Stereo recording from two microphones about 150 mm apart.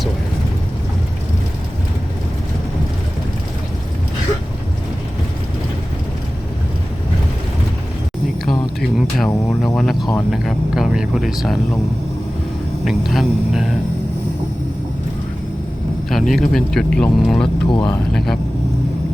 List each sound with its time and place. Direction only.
8.8 s a sound: centre (ahead or behind)
9.7 s speech: centre (ahead or behind)
12.8 s speech: centre (ahead or behind)
16.0 s speech: centre (ahead or behind)
17.7 s speech: 30° left (ahead or behind)